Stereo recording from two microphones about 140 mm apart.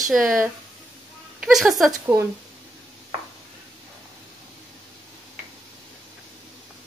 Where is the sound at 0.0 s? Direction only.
Centre (ahead or behind).